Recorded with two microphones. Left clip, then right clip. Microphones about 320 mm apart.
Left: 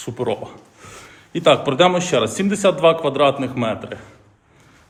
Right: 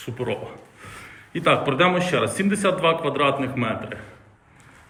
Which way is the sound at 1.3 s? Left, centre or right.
Centre.